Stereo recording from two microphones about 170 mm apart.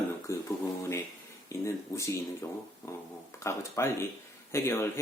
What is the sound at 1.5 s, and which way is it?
Speech, 15° left (ahead or behind).